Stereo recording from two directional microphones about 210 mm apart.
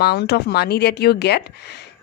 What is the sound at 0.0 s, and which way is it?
A woman's voice, 50° left (ahead or behind).